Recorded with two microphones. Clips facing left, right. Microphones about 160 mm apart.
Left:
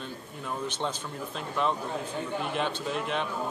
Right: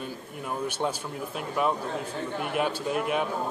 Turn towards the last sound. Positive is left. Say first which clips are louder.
# right 4 dB
turn(degrees=-10)  # may be behind; listen again after turning